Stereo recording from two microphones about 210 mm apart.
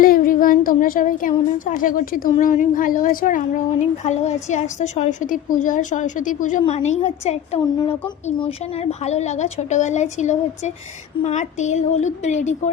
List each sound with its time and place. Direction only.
0.0 s speech: 40° left (ahead or behind)